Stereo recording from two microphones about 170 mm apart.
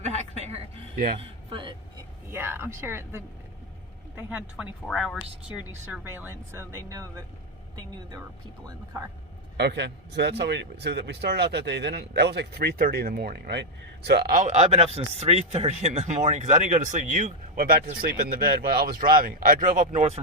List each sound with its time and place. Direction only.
0.0 s a sound: 40° right (ahead or behind)
0.9 s speech: 55° right (ahead or behind)
1.2 s a sound: 30° right (ahead or behind)
2.3 s speech: 15° right (ahead or behind)
4.3 s speech: 10° right (ahead or behind)
8.9 s speech: 20° right (ahead or behind)
9.6 s a man's voice: 90° right; by 14.3 s 70° right (ahead or behind)
14.3 s speech: 45° right (ahead or behind)